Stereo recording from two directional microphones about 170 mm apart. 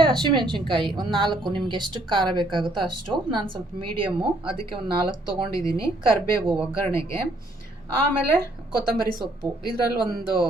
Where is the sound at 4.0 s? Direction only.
30° right (ahead or behind).